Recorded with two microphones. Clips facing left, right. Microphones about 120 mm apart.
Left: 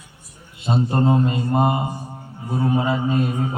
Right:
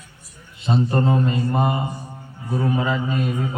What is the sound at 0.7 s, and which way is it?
A man's voice, 25° left (ahead or behind).